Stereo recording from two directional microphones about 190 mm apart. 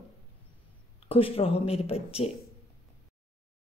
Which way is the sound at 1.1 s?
30° left (ahead or behind).